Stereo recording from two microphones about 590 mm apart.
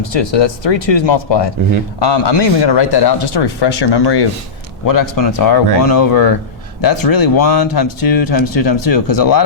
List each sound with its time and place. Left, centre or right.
0.0 s speech: left